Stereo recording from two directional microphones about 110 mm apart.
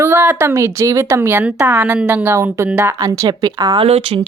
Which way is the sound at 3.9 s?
65° right (ahead or behind).